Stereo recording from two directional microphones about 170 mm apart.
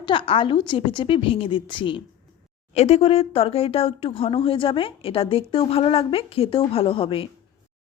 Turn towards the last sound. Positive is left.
turn(degrees=30)  # may be behind; listen again after turning